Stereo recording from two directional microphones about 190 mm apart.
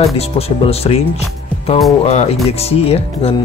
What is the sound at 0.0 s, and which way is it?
Speech, 30° left (ahead or behind).